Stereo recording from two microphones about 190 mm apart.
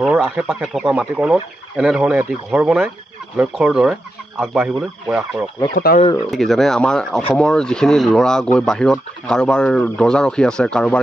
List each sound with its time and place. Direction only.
0.0 s speech: 5° right (ahead or behind)
5.8 s speech: 50° left (ahead or behind)
6.3 s speech: centre (ahead or behind)